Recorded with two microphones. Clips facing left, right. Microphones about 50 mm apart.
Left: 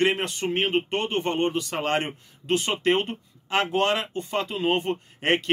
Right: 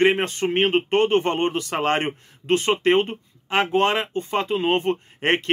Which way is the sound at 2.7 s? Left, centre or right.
Right.